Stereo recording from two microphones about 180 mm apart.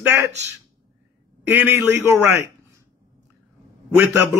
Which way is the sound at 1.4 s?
15° right (ahead or behind).